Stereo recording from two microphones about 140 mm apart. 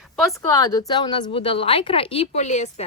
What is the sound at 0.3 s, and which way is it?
A woman's voice, 25° left (ahead or behind).